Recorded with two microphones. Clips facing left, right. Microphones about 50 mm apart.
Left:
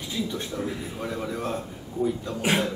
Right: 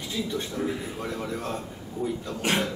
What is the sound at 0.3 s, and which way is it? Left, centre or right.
A man's voice, centre.